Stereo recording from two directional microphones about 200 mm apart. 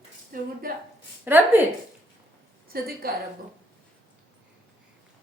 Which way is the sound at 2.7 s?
45° right (ahead or behind).